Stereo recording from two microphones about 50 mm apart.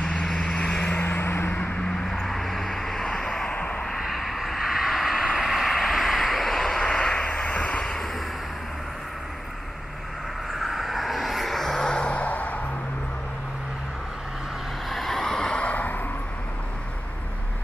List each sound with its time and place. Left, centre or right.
0.2 s vehicle: centre
0.9 s vehicle: left
1.9 s vehicle: centre
3.5 s vehicle: left
4.0 s vehicle: centre
6.8 s vehicle: centre
10.5 s vehicle: centre; by 12.5 s left
14.9 s vehicle: centre
15.5 s vehicle: left